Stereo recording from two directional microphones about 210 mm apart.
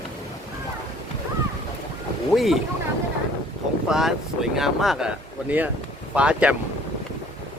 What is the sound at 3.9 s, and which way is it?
Speech, centre (ahead or behind).